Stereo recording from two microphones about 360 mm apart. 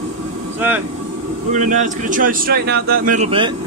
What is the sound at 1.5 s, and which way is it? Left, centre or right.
Speech, right.